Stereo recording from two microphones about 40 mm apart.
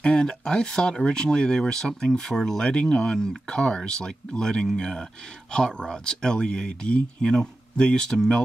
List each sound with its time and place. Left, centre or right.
0.0 s speech: left